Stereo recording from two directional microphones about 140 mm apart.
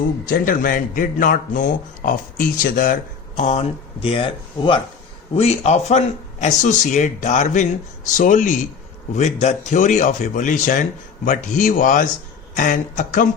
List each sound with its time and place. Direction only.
0.3 s a man's voice: 85° left
2.6 s speech: 85° left; by 4.8 s 40° left (ahead or behind)
5.4 s speech: 50° left (ahead or behind)
6.4 s a man's voice: 60° left (ahead or behind)
9.1 s a man's voice: 55° left (ahead or behind); by 13.2 s 70° left (ahead or behind)